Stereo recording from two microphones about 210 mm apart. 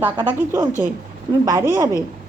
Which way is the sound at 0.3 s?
10° right (ahead or behind).